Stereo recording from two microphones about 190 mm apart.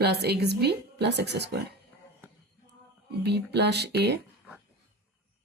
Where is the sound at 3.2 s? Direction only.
60° right (ahead or behind).